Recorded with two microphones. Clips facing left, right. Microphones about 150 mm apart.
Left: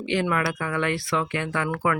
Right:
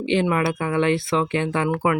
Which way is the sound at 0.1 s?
25° right (ahead or behind).